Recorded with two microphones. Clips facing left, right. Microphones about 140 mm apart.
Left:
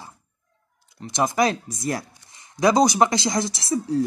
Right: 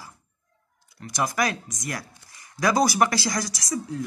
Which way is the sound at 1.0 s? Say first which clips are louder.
Left 5 dB; 25° left (ahead or behind).